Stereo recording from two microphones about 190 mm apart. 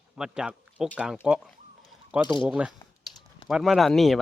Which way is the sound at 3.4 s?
Centre (ahead or behind).